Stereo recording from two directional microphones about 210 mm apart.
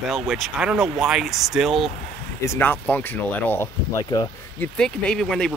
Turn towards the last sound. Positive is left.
turn(degrees=5)  # may be behind; listen again after turning